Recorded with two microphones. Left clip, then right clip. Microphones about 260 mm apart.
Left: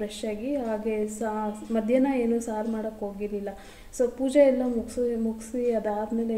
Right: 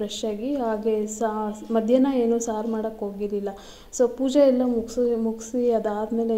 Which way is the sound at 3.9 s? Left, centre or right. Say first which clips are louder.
Right 2 dB; right.